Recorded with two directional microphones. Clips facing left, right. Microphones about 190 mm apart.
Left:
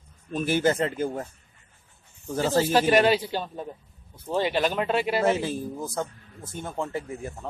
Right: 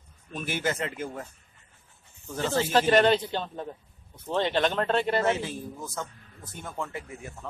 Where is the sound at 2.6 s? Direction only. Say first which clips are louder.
Even; 10° left (ahead or behind).